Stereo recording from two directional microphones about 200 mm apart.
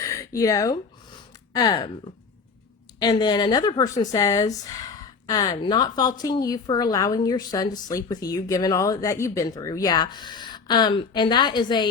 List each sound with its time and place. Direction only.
0.0 s a sound: 15° left (ahead or behind)
1.5 s speech: 20° left (ahead or behind)
3.0 s speech: 20° left (ahead or behind)